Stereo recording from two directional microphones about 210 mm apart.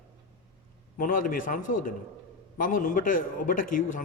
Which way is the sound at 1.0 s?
40° left (ahead or behind).